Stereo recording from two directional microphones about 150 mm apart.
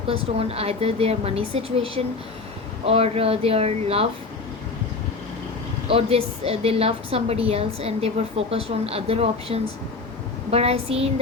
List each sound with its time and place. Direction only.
0.1 s a woman's voice: 40° right (ahead or behind)
5.9 s a woman's voice: 40° right (ahead or behind)